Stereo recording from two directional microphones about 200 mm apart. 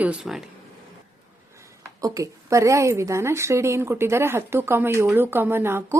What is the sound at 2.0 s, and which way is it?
Speech, 15° right (ahead or behind).